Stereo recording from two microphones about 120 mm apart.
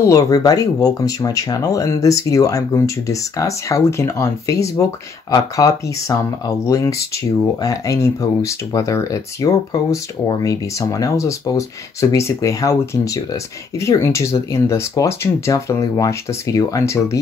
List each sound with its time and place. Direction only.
0.0 s speech: 25° left (ahead or behind)